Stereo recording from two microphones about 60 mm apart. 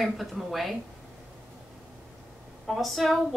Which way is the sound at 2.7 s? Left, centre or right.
Centre.